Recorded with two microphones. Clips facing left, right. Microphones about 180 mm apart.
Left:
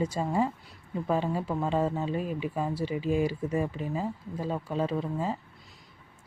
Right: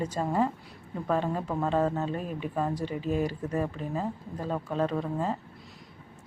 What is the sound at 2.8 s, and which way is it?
Speech, 45° right (ahead or behind).